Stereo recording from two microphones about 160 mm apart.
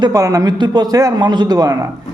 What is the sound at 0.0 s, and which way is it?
Mantra, 20° right (ahead or behind).